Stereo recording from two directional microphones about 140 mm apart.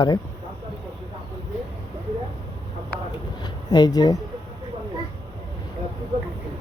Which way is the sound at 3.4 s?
30° left (ahead or behind).